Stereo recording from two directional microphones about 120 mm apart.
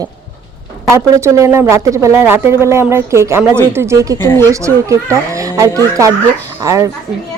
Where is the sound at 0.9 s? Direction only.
25° right (ahead or behind).